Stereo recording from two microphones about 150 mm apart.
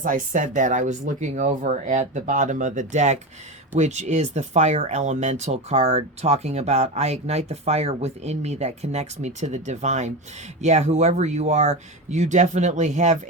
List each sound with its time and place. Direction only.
0.0 s speech: 60° right (ahead or behind)